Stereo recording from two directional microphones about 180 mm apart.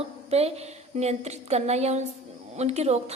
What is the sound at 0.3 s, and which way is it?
A woman's voice, 35° right (ahead or behind).